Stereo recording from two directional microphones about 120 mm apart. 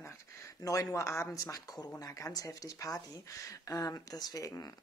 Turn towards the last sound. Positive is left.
turn(degrees=30)  # may be behind; listen again after turning